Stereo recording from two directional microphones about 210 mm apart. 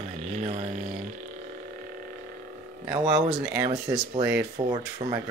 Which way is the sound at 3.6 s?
25° right (ahead or behind).